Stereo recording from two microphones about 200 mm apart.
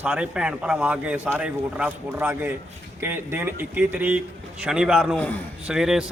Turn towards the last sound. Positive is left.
turn(degrees=0)  # may be behind; listen again after turning